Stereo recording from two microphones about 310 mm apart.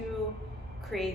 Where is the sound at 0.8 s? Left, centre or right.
Centre.